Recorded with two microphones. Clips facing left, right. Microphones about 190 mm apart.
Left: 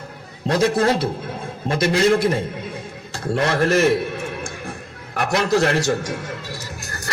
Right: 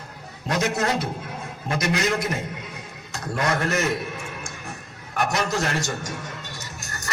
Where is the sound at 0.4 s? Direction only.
30° left (ahead or behind).